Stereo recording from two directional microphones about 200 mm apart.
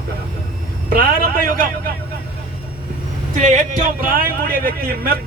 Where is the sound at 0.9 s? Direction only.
45° right (ahead or behind).